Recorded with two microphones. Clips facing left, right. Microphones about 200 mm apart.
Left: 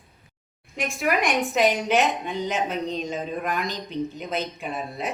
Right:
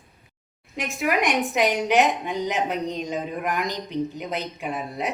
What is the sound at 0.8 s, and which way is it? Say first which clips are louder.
A woman's voice: even; 20° right (ahead or behind).